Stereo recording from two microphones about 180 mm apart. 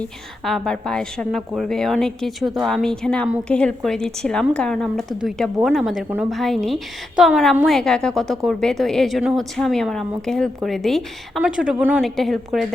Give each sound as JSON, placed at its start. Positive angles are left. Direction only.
{"t": 0.0, "sound": "a woman's voice", "side_deg": 0}